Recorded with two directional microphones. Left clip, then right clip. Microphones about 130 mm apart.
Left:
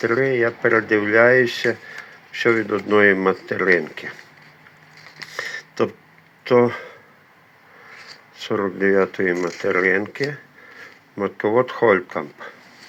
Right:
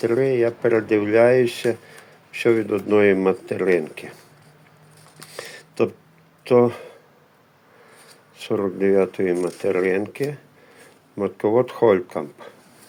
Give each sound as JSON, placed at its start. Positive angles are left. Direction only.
{"t": 0.0, "sound": "speech", "side_deg": -20}
{"t": 5.4, "sound": "a sound", "side_deg": -20}
{"t": 6.6, "sound": "speech", "side_deg": -20}
{"t": 8.4, "sound": "speech", "side_deg": -20}
{"t": 11.2, "sound": "speech", "side_deg": -25}